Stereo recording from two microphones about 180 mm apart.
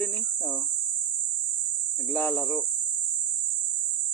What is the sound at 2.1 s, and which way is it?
Speech, 10° left (ahead or behind).